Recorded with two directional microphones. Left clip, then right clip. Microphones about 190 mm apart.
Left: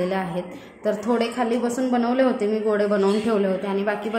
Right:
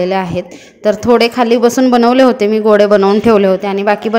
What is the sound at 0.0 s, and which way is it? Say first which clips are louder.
Speech: right 10 dB; 40° right (ahead or behind).